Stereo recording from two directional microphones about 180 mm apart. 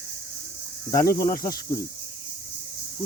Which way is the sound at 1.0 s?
15° left (ahead or behind).